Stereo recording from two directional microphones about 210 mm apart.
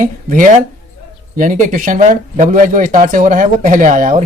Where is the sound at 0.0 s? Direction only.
40° right (ahead or behind).